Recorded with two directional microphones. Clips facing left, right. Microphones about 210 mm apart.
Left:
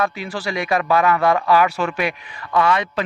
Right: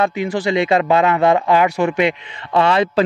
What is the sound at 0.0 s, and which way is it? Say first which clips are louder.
Speech: right 5 dB; 20° right (ahead or behind).